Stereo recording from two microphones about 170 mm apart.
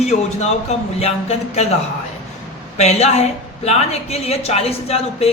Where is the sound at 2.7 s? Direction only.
40° left (ahead or behind).